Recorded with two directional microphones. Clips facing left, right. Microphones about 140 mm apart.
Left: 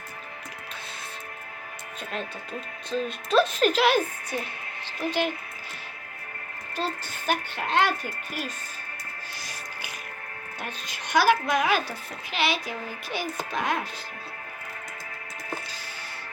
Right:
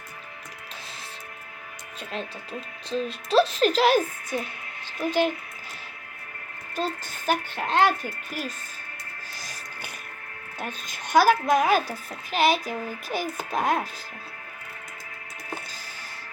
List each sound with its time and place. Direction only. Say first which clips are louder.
2.1 s a woman's voice: right 1 dB; 30° right (ahead or behind)
7.3 s speech: right 2 dB; 40° right (ahead or behind)
10.6 s a woman's voice: right 3 dB; 45° right (ahead or behind)